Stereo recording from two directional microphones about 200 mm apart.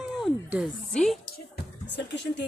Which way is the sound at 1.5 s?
60° left (ahead or behind).